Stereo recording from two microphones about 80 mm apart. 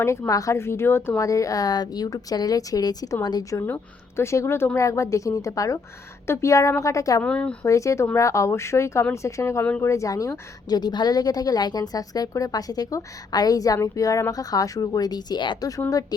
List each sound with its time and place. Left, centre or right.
0.0 s speech: left
1.2 s a woman's voice: left
4.2 s speech: left
7.2 s a woman's voice: centre
7.6 s a woman's voice: left